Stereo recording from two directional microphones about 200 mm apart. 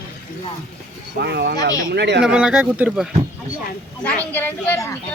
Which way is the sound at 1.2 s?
55° right (ahead or behind).